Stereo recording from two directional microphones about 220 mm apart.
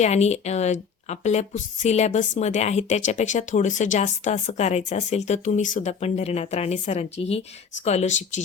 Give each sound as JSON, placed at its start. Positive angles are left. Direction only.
{"t": 0.0, "sound": "a woman's voice", "side_deg": 30}